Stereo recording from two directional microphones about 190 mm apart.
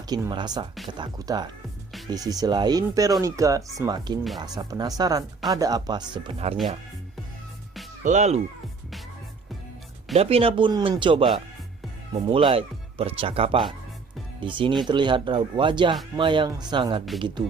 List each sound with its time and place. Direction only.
0.1 s speech: 20° right (ahead or behind)
8.0 s speech: 40° right (ahead or behind)
10.2 s speech: 30° right (ahead or behind)